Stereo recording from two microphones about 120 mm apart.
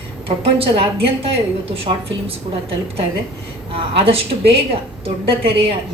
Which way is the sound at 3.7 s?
50° right (ahead or behind).